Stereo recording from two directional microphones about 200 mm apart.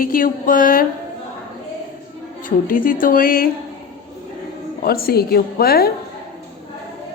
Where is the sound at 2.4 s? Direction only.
45° left (ahead or behind).